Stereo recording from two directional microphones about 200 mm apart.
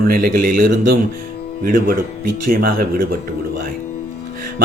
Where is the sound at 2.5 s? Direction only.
45° right (ahead or behind).